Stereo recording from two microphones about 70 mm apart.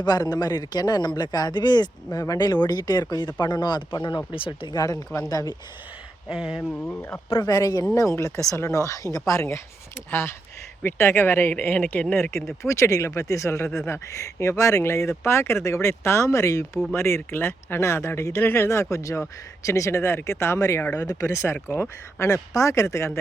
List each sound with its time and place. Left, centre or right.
0.0 s a man's voice: left
3.4 s speech: left
6.2 s speech: centre
6.6 s a man's voice: left
7.4 s speech: left
10.1 s speech: left
11.5 s a man's voice: left
12.6 s speech: left
16.9 s speech: left
18.3 s speech: left
20.8 s a man's voice: left
21.1 s speech: left